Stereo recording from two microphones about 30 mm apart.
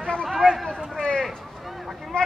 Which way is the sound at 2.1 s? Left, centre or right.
Left.